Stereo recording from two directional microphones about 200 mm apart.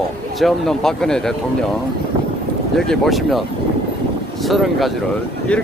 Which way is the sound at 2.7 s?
Centre (ahead or behind).